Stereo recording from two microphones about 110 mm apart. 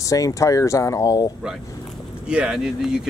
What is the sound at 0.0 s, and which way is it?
Speech, 30° left (ahead or behind).